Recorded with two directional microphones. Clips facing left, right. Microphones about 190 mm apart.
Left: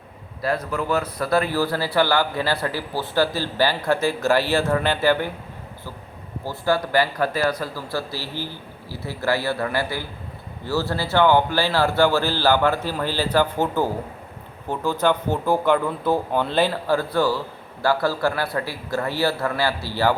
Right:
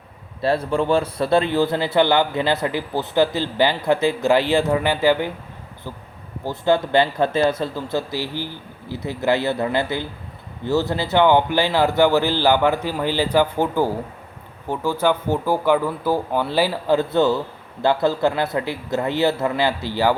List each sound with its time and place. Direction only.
0.4 s a man's voice: 30° right (ahead or behind)
6.4 s a man's voice: 20° right (ahead or behind)
15.0 s a man's voice: 10° right (ahead or behind)